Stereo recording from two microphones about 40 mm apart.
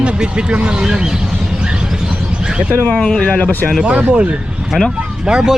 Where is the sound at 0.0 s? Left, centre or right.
Right.